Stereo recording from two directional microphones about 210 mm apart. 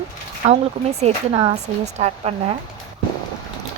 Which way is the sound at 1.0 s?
30° right (ahead or behind).